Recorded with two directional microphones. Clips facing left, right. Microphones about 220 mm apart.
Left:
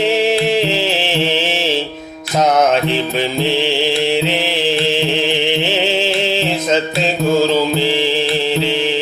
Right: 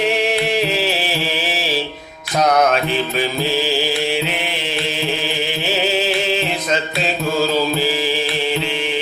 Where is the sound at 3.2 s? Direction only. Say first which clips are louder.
Left 3 dB; 25° left (ahead or behind).